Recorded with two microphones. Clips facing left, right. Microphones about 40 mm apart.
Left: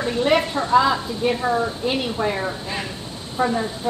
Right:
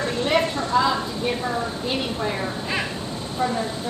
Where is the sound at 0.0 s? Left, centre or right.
Centre.